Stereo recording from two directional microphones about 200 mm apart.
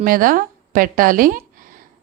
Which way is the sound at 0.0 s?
45° right (ahead or behind).